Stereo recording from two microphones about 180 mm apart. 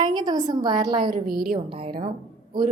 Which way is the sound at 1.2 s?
Centre (ahead or behind).